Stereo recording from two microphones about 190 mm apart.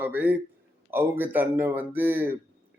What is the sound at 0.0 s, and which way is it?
Speech, 10° right (ahead or behind).